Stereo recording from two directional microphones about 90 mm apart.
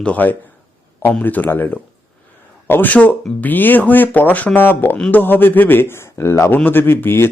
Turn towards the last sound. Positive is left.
turn(degrees=25)  # may be behind; listen again after turning